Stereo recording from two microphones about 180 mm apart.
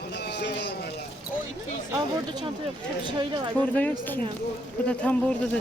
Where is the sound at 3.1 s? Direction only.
25° right (ahead or behind).